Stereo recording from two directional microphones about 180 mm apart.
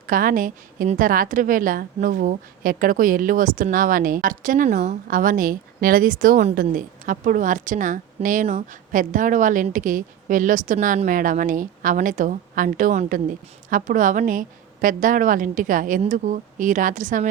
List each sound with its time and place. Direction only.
0.1 s a woman's voice: 50° right (ahead or behind)